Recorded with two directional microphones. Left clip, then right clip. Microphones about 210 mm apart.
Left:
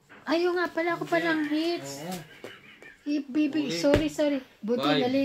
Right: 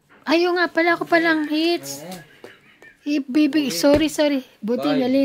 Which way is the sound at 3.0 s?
55° right (ahead or behind).